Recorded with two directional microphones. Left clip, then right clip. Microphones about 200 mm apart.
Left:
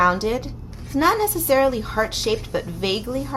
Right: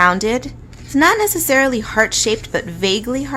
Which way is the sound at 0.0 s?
40° right (ahead or behind).